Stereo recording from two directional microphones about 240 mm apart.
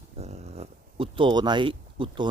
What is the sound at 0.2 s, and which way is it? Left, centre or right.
Speech, right.